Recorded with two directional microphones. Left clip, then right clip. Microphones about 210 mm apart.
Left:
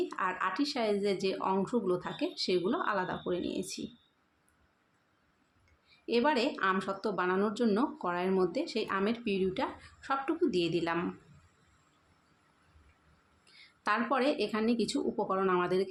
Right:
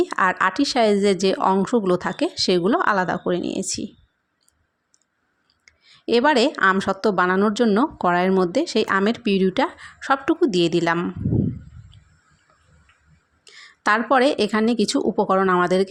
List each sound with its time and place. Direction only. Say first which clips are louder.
0.0 s a woman's voice: right 14 dB; 40° right (ahead or behind)
5.9 s a woman's voice: right 12 dB; 40° right (ahead or behind)
13.4 s a woman's voice: right 13 dB; 40° right (ahead or behind)